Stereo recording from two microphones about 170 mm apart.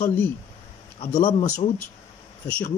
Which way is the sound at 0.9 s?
40° left (ahead or behind).